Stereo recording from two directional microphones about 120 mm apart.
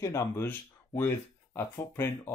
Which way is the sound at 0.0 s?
25° left (ahead or behind).